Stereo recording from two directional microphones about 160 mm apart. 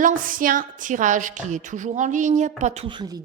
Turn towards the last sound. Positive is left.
turn(degrees=-25)  # may be behind; listen again after turning